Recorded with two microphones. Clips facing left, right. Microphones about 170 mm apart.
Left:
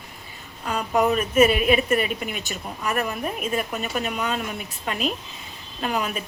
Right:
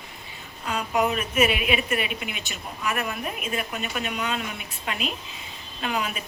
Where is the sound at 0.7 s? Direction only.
40° left (ahead or behind).